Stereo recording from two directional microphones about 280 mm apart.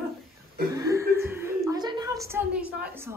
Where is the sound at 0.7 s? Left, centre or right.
Centre.